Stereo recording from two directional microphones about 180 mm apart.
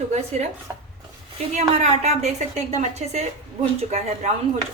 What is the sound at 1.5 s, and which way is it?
A woman's voice, 40° right (ahead or behind).